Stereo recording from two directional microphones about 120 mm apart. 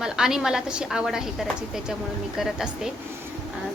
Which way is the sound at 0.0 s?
5° right (ahead or behind).